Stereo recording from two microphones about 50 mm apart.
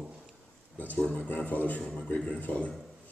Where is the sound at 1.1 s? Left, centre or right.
Left.